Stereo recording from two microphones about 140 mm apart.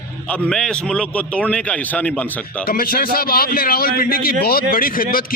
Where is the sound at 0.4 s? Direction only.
5° left (ahead or behind).